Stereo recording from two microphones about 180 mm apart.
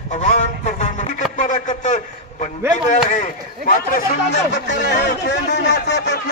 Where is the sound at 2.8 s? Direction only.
40° left (ahead or behind); by 6.2 s 75° left (ahead or behind).